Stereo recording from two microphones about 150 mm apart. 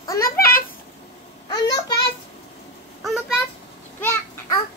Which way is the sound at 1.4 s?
25° left (ahead or behind).